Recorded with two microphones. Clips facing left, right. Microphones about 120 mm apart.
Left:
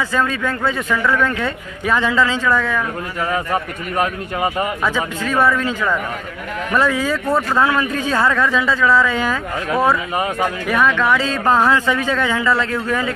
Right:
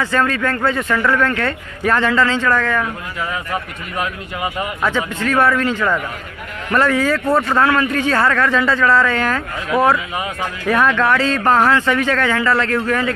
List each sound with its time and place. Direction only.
0.0 s speech: 10° left (ahead or behind)
3.3 s speech: 40° left (ahead or behind)
4.8 s speech: 10° left (ahead or behind)
7.3 s speech: centre (ahead or behind)
7.6 s speech: 15° left (ahead or behind)
10.1 s speech: 45° left (ahead or behind)
10.7 s speech: centre (ahead or behind)